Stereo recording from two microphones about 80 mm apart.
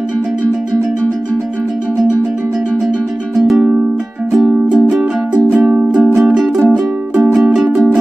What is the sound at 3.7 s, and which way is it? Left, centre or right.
Music, centre.